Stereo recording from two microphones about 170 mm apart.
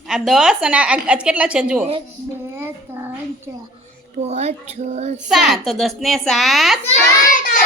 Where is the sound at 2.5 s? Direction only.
15° right (ahead or behind).